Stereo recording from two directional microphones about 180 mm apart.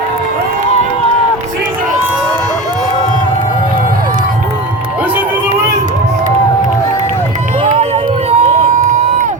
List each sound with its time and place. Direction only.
7.6 s crowd: 40° right (ahead or behind)